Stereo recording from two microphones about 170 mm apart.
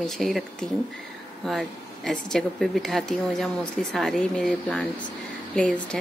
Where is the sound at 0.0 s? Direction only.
Centre (ahead or behind).